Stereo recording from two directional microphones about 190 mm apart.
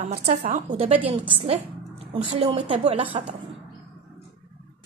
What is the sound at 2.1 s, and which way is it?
A woman's voice, 30° right (ahead or behind).